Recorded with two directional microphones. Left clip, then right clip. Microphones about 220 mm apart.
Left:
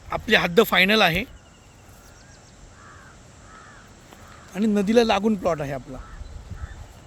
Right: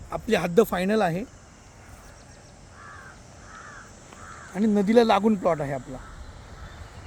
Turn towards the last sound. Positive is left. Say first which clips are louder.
# even
turn(degrees=5)  # may be behind; listen again after turning